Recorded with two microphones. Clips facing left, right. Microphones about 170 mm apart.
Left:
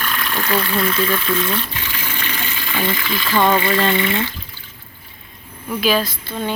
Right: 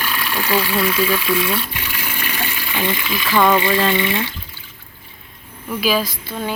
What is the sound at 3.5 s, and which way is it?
Speech, 15° right (ahead or behind).